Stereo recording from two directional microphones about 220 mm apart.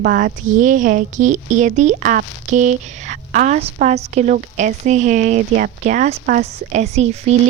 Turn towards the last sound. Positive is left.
turn(degrees=-30)  # may be behind; listen again after turning